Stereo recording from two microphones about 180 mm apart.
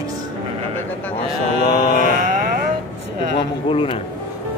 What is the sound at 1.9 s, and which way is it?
Mantra, 45° right (ahead or behind).